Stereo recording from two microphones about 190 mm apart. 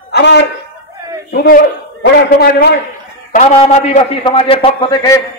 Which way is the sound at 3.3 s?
35° left (ahead or behind).